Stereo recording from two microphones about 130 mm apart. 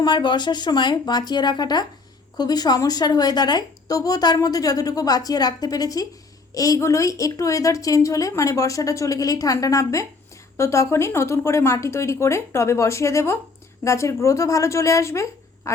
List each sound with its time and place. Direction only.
0.0 s a woman's voice: 35° left (ahead or behind)